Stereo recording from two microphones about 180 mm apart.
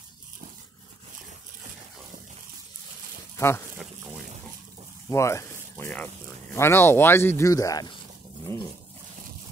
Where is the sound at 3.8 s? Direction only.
Centre (ahead or behind).